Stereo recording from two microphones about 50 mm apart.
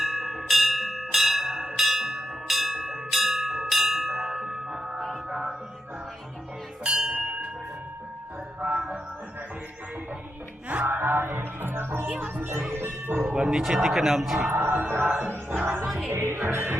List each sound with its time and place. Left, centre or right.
0.0 s bell: centre
5.3 s music: centre
6.8 s bell: centre
8.6 s music: right
10.8 s music: right
12.0 s music: right
12.4 s music: right
13.3 s a sound: centre
13.6 s speech: centre
14.5 s music: right
16.0 s music: right